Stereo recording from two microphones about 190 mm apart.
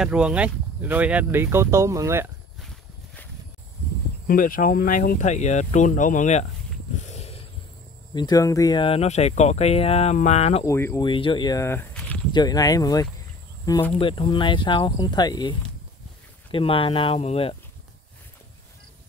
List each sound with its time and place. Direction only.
0.0 s speech: 5° right (ahead or behind)
2.6 s walk: centre (ahead or behind)
4.3 s speech: 45° left (ahead or behind)
7.0 s a sound: 35° left (ahead or behind)
8.1 s speech: 20° left (ahead or behind)
10.6 s speech: 15° left (ahead or behind)
11.1 s speech: 25° left (ahead or behind); by 12.2 s 10° left (ahead or behind)
12.3 s speech: 20° left (ahead or behind)
13.9 s speech: 25° left (ahead or behind)
16.5 s speech: 30° left (ahead or behind)